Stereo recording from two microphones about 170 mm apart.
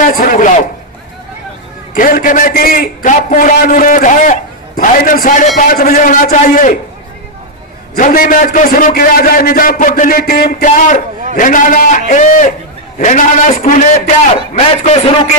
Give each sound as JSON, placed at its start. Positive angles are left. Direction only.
{"t": 0.0, "sound": "a man's voice", "side_deg": 55}
{"t": 2.0, "sound": "a man's voice", "side_deg": 55}
{"t": 7.9, "sound": "a man's voice", "side_deg": 55}